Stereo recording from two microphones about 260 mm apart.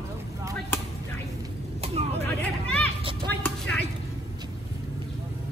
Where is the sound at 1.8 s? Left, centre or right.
Right.